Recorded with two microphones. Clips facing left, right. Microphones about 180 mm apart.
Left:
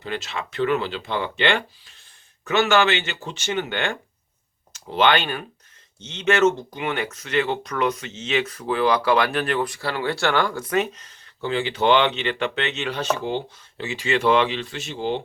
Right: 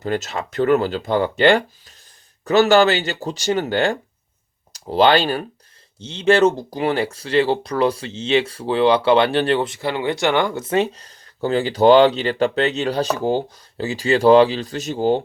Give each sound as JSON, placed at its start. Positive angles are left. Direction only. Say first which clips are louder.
{"t": 0.0, "sound": "speech", "louder": "right 6 dB", "side_deg": -45}